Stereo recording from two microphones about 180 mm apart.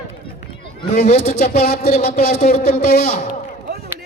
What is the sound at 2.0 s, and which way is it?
Speech, 60° left (ahead or behind).